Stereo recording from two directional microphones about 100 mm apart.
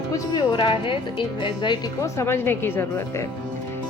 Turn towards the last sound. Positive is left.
turn(degrees=25)  # may be behind; listen again after turning